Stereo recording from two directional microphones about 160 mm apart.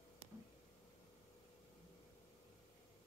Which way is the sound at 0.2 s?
15° right (ahead or behind).